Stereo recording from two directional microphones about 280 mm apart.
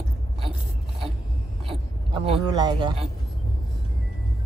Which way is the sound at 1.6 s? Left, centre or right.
Centre.